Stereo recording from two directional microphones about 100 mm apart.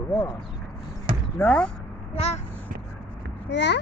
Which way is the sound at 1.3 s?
15° left (ahead or behind).